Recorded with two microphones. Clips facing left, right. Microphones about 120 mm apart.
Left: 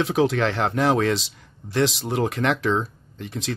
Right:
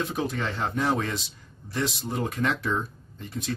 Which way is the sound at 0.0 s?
90° left.